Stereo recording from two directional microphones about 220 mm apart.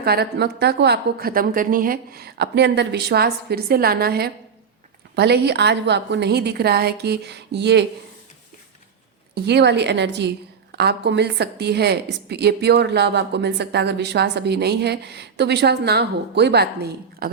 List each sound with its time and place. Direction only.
0.0 s a woman's voice: 45° right (ahead or behind)
9.3 s a woman's voice: 50° right (ahead or behind)